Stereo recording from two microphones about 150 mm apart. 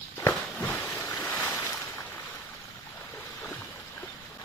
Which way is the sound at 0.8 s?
20° left (ahead or behind).